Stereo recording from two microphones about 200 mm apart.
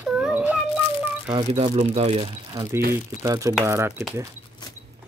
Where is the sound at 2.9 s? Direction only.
15° right (ahead or behind).